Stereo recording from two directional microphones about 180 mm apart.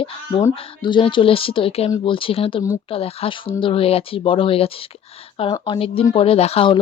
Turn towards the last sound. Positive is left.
turn(degrees=30)  # may be behind; listen again after turning